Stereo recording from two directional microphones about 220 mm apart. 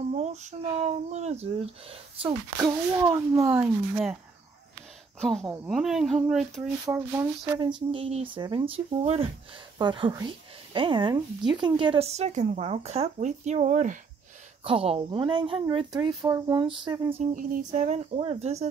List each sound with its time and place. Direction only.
0.1 s a sound: 30° right (ahead or behind)
2.2 s speech: 15° right (ahead or behind)
3.5 s speech: 5° right (ahead or behind)
5.2 s speech: centre (ahead or behind)
7.2 s speech: 20° right (ahead or behind)
17.2 s a sound: 35° right (ahead or behind)
17.7 s speech: 30° right (ahead or behind)